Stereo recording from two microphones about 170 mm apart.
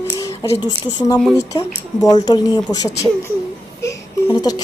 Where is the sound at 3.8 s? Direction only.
20° left (ahead or behind).